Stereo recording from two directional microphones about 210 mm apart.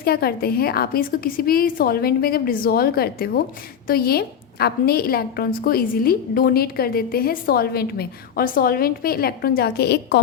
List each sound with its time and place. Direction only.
0.0 s a woman's voice: 45° left (ahead or behind)